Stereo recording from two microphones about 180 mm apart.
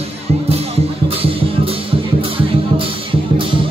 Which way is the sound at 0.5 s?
35° right (ahead or behind).